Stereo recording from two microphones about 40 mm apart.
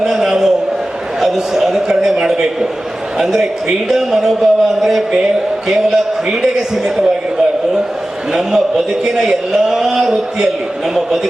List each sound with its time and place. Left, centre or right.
0.0 s a sound: centre
1.2 s a man's voice: centre
6.3 s a man's voice: centre
8.3 s a man's voice: centre